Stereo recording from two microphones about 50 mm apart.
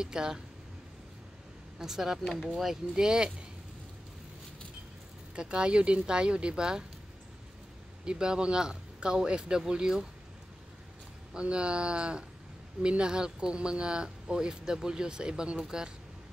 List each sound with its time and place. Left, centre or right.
0.0 s speech: centre
1.8 s speech: centre
5.3 s speech: centre
8.0 s speech: centre
11.3 s speech: centre